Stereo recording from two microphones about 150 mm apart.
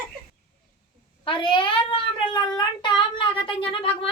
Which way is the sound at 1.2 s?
35° left (ahead or behind).